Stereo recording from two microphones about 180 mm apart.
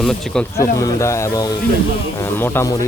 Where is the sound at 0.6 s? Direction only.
20° left (ahead or behind).